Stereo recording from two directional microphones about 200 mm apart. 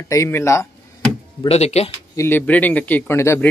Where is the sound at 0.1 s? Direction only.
15° left (ahead or behind).